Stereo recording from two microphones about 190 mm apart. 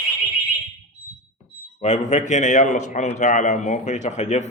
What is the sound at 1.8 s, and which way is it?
A man's voice, 40° left (ahead or behind).